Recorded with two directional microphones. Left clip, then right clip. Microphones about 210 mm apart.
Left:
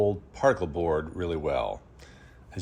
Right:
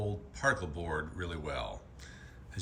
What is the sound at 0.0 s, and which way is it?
Speech, 15° left (ahead or behind).